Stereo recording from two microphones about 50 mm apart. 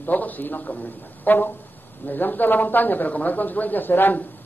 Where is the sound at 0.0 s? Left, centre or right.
Left.